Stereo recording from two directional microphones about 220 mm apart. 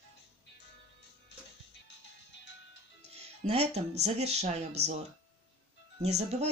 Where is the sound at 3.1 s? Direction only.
30° right (ahead or behind).